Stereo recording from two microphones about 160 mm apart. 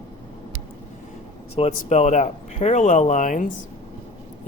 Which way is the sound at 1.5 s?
40° left (ahead or behind).